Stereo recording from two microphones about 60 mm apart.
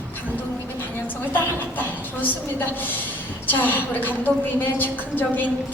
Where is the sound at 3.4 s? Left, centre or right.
Left.